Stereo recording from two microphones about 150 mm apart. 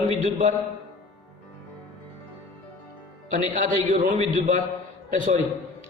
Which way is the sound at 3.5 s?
60° right (ahead or behind).